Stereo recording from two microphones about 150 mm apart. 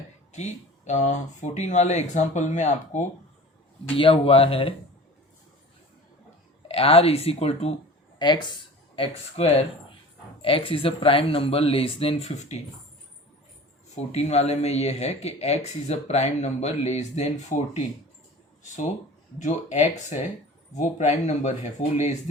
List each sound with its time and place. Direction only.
0.3 s speech: 50° left (ahead or behind)
3.9 s speech: 35° left (ahead or behind)
6.7 s speech: 40° left (ahead or behind)
8.2 s speech: 30° left (ahead or behind)
9.0 s speech: 40° left (ahead or behind)
13.9 s speech: 45° left (ahead or behind)
19.4 s speech: 50° left (ahead or behind)